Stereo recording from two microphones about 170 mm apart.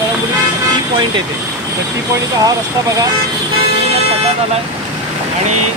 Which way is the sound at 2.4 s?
20° right (ahead or behind).